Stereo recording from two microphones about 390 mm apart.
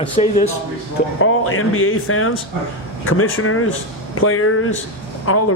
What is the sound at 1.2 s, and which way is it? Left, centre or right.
Speech, left.